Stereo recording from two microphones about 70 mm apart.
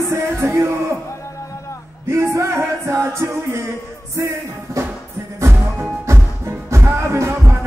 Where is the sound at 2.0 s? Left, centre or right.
Right.